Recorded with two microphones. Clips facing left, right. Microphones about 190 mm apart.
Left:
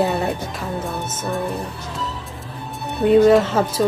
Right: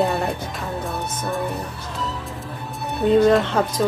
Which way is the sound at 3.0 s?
Centre (ahead or behind).